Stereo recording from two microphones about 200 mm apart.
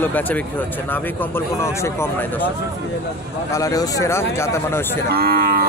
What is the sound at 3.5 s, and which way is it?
Speech, 15° left (ahead or behind).